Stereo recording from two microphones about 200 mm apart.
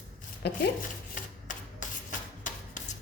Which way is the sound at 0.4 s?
45° left (ahead or behind).